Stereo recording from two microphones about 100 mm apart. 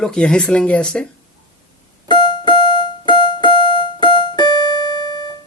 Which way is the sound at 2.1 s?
55° left (ahead or behind).